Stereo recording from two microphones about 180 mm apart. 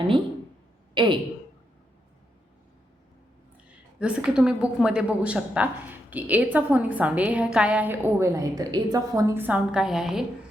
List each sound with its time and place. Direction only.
0.9 s a woman's voice: 25° right (ahead or behind)
4.0 s a woman's voice: 5° right (ahead or behind)